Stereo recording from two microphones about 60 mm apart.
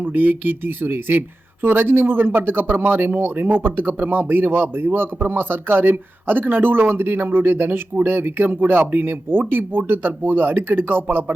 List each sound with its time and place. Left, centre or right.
0.0 s speech: right